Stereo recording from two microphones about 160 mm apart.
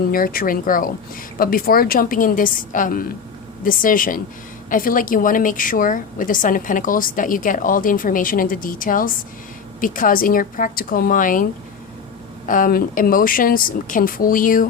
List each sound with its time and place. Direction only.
0.1 s a woman's voice: 65° left (ahead or behind)
12.5 s a woman's voice: 55° left (ahead or behind)